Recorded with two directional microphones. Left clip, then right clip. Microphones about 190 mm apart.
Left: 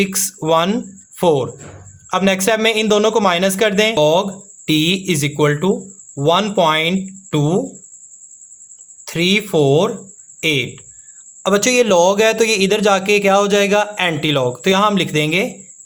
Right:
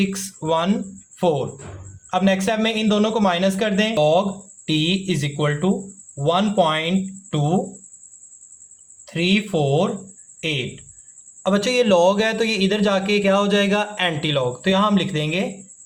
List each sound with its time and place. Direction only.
0.0 s a man's voice: 40° left (ahead or behind)
9.0 s a man's voice: 45° left (ahead or behind)